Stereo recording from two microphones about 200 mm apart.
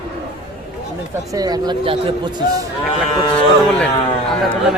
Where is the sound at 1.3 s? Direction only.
20° right (ahead or behind).